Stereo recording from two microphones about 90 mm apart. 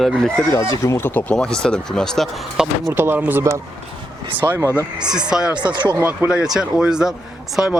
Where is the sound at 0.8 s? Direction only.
35° left (ahead or behind).